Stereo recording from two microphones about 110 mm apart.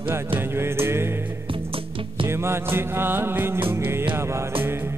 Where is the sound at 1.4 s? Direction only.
50° right (ahead or behind).